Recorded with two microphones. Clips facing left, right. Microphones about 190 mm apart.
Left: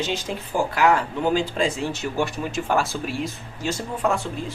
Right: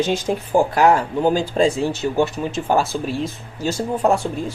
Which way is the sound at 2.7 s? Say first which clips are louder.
Right 5 dB; 30° right (ahead or behind).